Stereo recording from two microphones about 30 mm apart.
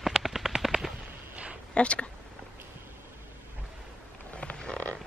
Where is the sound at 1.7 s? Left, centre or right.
Left.